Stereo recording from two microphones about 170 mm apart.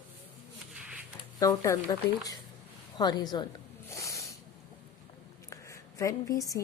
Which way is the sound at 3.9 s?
20° left (ahead or behind).